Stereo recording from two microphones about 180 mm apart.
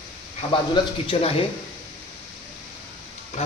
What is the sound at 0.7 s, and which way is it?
Speech, 30° left (ahead or behind).